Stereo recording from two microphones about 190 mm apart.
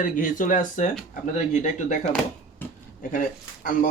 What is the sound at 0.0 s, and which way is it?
Speech, 45° left (ahead or behind).